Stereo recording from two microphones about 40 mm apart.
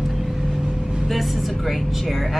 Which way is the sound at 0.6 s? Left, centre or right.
Centre.